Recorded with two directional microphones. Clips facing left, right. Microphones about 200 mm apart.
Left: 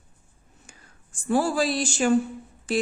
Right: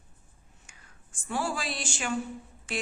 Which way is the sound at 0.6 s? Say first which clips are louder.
Left 5 dB; 35° left (ahead or behind).